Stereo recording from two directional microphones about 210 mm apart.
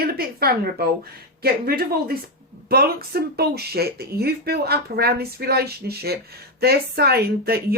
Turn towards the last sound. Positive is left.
turn(degrees=-50)  # may be behind; listen again after turning